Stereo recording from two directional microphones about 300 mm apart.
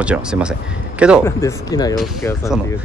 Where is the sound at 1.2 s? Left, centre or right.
Centre.